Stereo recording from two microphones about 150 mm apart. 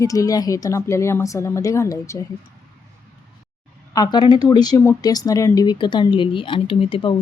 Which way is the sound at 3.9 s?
25° left (ahead or behind).